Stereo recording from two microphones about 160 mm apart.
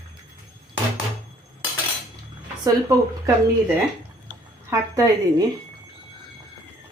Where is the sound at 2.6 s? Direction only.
20° right (ahead or behind).